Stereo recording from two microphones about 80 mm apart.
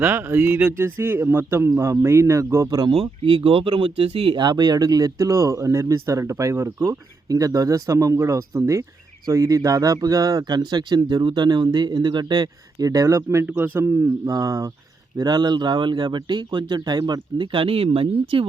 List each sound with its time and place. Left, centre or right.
0.3 s speech: right
2.6 s speech: right
3.5 s speech: right
7.3 s speech: right
13.4 s speech: right
14.3 s speech: right
15.2 s speech: right